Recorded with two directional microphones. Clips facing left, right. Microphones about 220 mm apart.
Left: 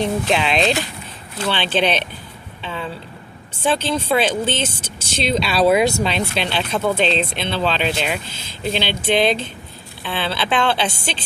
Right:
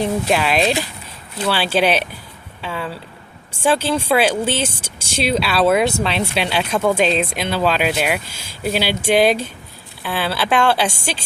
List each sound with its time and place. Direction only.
0.0 s speech: 5° right (ahead or behind)
2.6 s a sound: 5° right (ahead or behind)
3.5 s speech: 10° right (ahead or behind)